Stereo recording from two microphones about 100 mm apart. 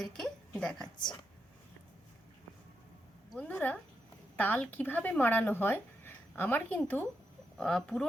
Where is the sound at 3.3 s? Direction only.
15° left (ahead or behind).